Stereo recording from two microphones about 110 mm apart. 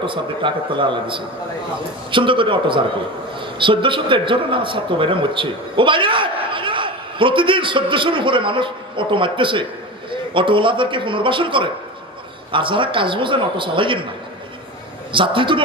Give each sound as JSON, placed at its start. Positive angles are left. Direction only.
{"t": 0.0, "sound": "a man's voice", "side_deg": -50}
{"t": 15.1, "sound": "a man's voice", "side_deg": -50}